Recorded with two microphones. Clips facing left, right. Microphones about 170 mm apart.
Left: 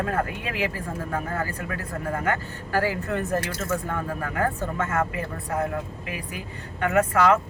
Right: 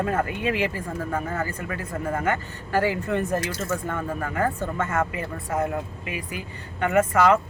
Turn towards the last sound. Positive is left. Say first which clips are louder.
# right 1 dB
turn(degrees=0)  # may be behind; listen again after turning